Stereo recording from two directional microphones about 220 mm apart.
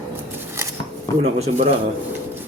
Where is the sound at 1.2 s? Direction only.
30° right (ahead or behind).